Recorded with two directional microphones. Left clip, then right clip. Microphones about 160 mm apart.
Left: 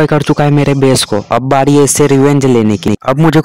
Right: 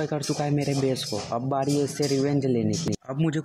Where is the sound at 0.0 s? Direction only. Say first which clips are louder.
Left 17 dB; 60° left (ahead or behind).